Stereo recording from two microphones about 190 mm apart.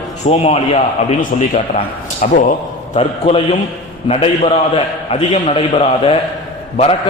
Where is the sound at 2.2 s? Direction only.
40° left (ahead or behind).